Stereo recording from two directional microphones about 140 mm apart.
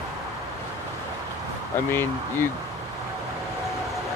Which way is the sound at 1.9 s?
15° left (ahead or behind).